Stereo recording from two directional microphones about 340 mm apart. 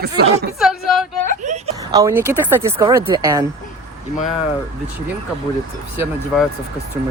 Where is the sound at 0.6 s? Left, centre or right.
Centre.